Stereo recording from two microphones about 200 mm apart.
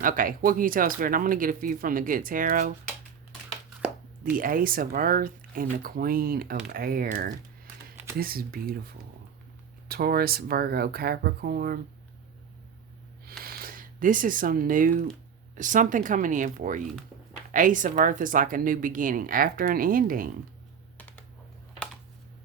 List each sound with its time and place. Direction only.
0.0 s speech: 45° right (ahead or behind)
4.2 s speech: 45° right (ahead or behind)
9.9 s speech: 50° right (ahead or behind)
13.4 s speech: 45° right (ahead or behind)